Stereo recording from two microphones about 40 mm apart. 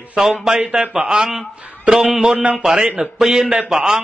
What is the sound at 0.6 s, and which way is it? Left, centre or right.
Speech, right.